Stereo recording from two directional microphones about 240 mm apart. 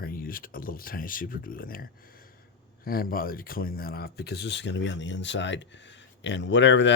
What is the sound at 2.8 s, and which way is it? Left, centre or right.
Speech, left.